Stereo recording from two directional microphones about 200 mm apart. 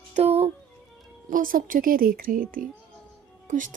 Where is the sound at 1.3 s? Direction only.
45° right (ahead or behind).